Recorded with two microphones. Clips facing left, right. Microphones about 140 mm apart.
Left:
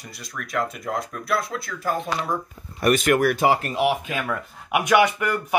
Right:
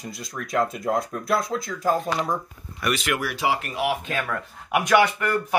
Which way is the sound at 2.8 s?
50° left (ahead or behind).